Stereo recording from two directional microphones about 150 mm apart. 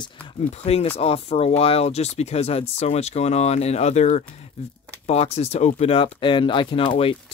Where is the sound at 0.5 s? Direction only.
45° left (ahead or behind).